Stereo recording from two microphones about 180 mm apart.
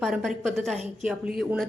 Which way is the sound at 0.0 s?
Centre (ahead or behind).